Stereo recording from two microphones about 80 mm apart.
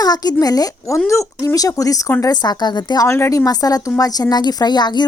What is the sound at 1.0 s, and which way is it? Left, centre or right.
A woman's voice, left.